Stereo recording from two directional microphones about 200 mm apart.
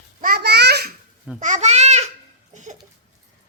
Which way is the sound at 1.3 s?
40° right (ahead or behind).